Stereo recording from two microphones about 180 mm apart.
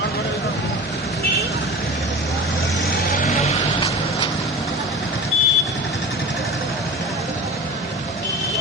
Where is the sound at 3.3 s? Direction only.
35° left (ahead or behind).